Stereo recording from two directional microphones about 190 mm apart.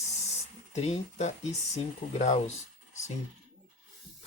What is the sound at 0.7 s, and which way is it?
Speech, 35° left (ahead or behind).